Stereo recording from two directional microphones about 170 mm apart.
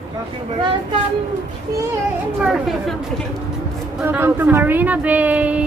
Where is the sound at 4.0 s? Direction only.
10° right (ahead or behind).